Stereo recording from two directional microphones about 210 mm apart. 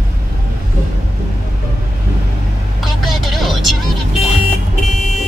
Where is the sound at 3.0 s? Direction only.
Centre (ahead or behind).